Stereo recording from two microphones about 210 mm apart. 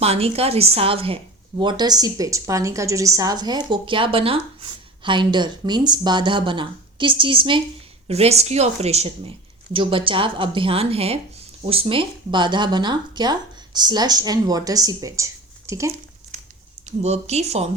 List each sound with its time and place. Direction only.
0.0 s a woman's voice: 30° right (ahead or behind)
16.8 s speech: 30° right (ahead or behind)